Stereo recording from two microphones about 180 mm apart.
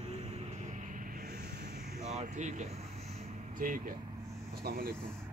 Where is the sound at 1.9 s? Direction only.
40° right (ahead or behind).